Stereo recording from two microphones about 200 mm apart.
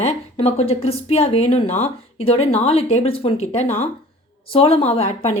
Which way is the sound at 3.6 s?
10° left (ahead or behind).